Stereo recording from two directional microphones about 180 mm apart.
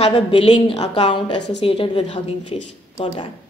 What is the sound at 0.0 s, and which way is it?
A woman's voice, 30° left (ahead or behind).